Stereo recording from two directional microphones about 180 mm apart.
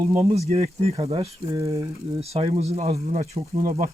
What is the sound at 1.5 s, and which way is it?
Speech, 20° right (ahead or behind).